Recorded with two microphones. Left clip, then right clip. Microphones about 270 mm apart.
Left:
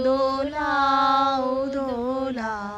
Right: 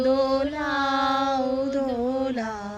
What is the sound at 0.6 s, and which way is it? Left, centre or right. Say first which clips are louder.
Chant: left 4 dB; left.